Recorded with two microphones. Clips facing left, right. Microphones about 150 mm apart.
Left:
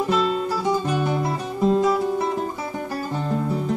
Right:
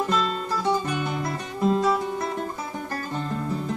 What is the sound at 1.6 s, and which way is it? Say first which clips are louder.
Guitar: left 3 dB; centre (ahead or behind).